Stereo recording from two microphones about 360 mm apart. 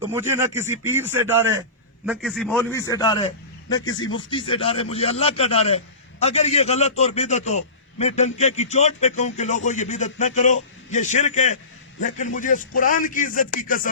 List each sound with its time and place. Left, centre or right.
0.0 s a man's voice: centre; by 13.8 s left